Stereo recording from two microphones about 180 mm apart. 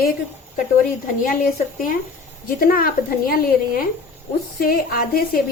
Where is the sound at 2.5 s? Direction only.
55° left (ahead or behind).